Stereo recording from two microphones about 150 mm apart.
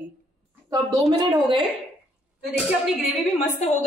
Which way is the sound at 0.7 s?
25° right (ahead or behind).